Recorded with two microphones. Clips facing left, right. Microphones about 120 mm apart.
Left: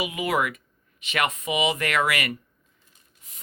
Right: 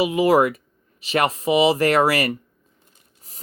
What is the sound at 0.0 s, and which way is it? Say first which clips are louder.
A man's voice: right 9 dB; 30° right (ahead or behind).